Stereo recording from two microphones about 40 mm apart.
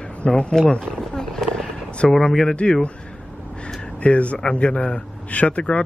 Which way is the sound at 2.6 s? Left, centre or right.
Left.